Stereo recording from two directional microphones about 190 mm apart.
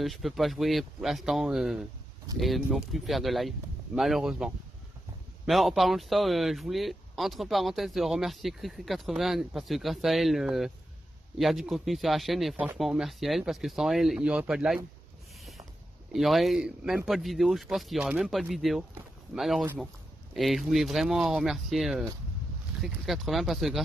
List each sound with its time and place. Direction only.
0.0 s speech: centre (ahead or behind)
5.5 s speech: centre (ahead or behind)
16.1 s speech: centre (ahead or behind)